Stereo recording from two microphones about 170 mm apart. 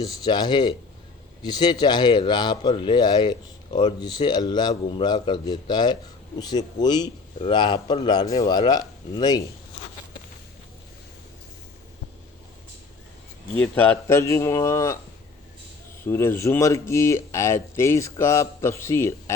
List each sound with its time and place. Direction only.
0.0 s speech: 25° left (ahead or behind)
13.6 s speech: 10° left (ahead or behind)
16.0 s speech: 15° left (ahead or behind)